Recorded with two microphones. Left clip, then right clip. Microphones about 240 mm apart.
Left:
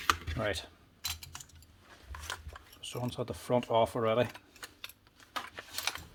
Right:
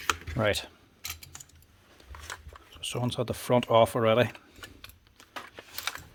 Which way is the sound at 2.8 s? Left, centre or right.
Right.